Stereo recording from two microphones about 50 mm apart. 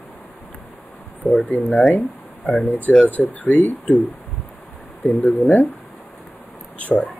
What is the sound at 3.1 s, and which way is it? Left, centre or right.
Speech, left.